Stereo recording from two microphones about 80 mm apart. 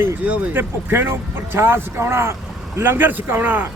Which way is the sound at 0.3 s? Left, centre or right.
Right.